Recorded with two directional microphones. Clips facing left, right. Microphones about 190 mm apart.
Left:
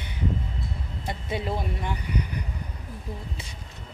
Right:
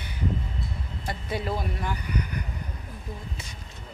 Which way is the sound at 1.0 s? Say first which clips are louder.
Even; 20° left (ahead or behind).